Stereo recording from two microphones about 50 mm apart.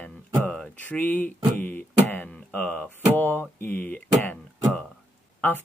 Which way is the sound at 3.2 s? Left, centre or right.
Left.